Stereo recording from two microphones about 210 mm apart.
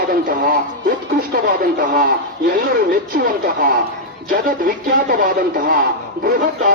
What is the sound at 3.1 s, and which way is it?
Speech, 45° right (ahead or behind).